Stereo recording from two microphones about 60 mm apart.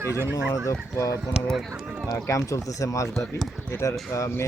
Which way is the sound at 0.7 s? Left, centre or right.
Left.